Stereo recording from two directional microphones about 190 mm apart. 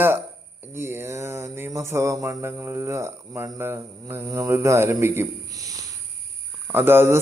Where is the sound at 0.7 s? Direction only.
10° right (ahead or behind).